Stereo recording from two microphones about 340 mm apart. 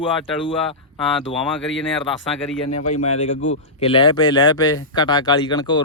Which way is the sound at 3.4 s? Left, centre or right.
Centre.